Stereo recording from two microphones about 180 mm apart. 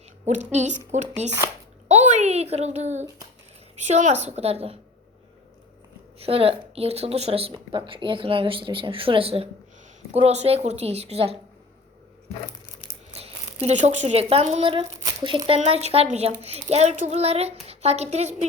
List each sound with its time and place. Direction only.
0.3 s speech: 40° right (ahead or behind)
1.9 s a sound: 40° right (ahead or behind)
3.8 s speech: 40° right (ahead or behind)
6.1 s speech: 30° right (ahead or behind)
13.1 s speech: 35° right (ahead or behind)